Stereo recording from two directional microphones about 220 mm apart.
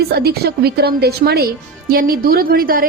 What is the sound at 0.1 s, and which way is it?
A woman's voice, 45° right (ahead or behind).